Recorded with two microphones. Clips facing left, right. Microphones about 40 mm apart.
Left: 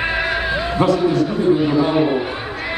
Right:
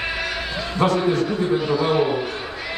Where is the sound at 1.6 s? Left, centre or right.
Centre.